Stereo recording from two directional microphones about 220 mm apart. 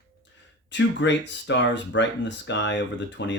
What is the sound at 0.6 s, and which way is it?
Speech, 55° left (ahead or behind).